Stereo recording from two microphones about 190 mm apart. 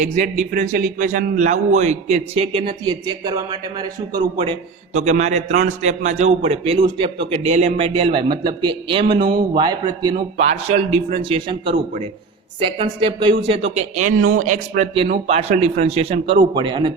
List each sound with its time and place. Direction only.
0.5 s a man's voice: 45° right (ahead or behind); by 4.2 s 20° right (ahead or behind)
4.9 s a man's voice: 35° right (ahead or behind)
9.1 s a man's voice: 50° right (ahead or behind)
9.6 s speech: 20° right (ahead or behind)
10.3 s a man's voice: 35° right (ahead or behind)
13.7 s a man's voice: 40° right (ahead or behind)